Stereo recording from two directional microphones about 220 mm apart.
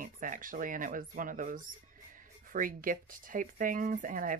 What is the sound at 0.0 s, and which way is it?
Speech, 40° right (ahead or behind).